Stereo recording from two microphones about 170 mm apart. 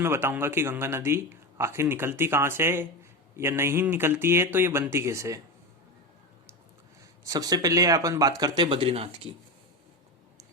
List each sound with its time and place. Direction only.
0.0 s speech: 15° right (ahead or behind)
7.3 s speech: 20° right (ahead or behind)